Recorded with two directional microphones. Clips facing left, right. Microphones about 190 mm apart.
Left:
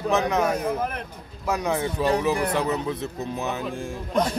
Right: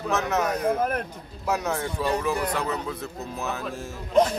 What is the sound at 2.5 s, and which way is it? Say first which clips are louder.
Speech: left 4 dB; 20° left (ahead or behind).